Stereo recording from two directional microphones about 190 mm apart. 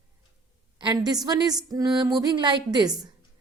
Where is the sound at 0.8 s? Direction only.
20° right (ahead or behind).